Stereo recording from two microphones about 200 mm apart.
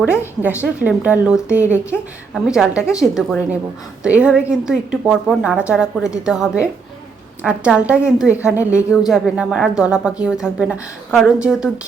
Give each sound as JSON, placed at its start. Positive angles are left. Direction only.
{"t": 0.0, "sound": "a woman's voice", "side_deg": -5}
{"t": 4.0, "sound": "a woman's voice", "side_deg": -5}